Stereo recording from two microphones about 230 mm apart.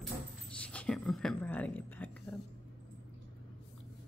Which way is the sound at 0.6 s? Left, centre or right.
Centre.